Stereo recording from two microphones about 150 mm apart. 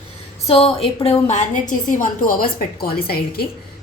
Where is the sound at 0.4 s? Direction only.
40° left (ahead or behind).